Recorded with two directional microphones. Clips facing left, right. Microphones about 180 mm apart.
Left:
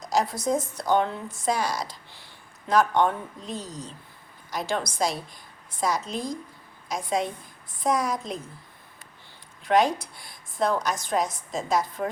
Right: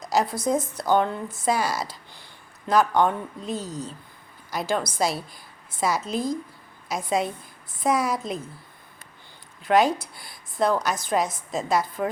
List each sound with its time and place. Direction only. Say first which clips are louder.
0.0 s a woman's voice: right 2 dB; centre (ahead or behind)
9.6 s a woman's voice: right 2 dB; centre (ahead or behind)